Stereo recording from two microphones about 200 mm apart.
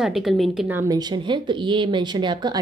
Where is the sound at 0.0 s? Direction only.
Centre (ahead or behind).